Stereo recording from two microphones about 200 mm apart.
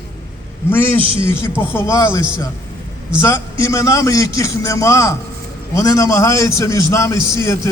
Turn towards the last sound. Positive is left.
turn(degrees=15)  # may be behind; listen again after turning